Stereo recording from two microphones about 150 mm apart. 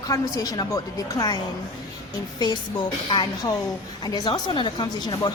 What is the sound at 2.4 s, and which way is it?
A woman's voice, 30° left (ahead or behind).